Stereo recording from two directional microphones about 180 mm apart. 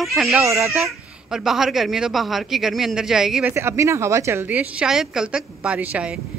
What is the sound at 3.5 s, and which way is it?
A woman's voice, 15° right (ahead or behind).